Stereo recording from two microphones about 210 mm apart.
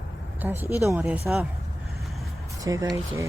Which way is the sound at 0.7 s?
10° right (ahead or behind).